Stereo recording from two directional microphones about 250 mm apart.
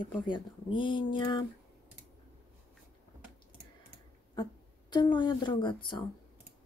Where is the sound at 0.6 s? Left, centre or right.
Centre.